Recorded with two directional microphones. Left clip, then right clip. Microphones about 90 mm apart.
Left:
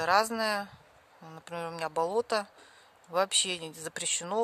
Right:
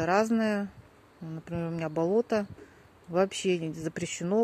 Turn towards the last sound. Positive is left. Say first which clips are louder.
# even
turn(degrees=15)  # may be behind; listen again after turning